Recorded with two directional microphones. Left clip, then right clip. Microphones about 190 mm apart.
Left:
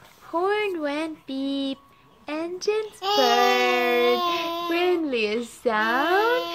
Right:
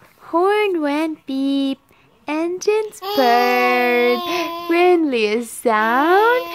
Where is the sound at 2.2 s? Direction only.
45° right (ahead or behind).